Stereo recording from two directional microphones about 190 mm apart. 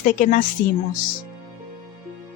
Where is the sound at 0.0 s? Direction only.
45° left (ahead or behind).